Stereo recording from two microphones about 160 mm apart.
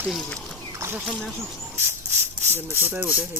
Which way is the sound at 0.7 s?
15° right (ahead or behind).